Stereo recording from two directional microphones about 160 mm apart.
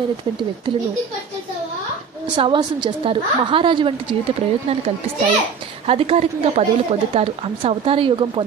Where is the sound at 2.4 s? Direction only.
30° right (ahead or behind).